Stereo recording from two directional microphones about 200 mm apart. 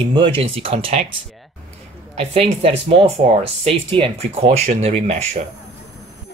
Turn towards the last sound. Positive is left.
turn(degrees=-35)  # may be behind; listen again after turning